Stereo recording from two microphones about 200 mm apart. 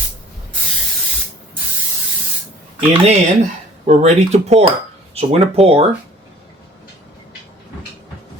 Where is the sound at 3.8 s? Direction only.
35° right (ahead or behind).